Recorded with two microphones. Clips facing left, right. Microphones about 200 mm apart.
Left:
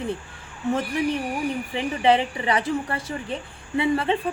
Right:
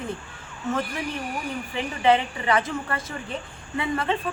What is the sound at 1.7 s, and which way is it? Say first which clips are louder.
A woman's voice: even; 30° left (ahead or behind).